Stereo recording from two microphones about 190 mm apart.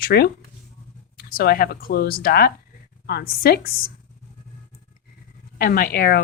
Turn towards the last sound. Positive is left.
turn(degrees=55)  # may be behind; listen again after turning